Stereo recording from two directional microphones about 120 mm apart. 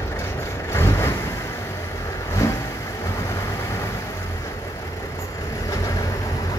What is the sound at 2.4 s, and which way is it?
Vehicle, 25° left (ahead or behind).